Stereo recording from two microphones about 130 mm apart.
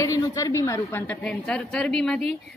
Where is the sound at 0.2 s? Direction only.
25° left (ahead or behind).